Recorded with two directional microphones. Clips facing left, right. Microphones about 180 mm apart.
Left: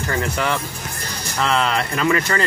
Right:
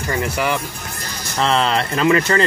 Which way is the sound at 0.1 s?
10° right (ahead or behind).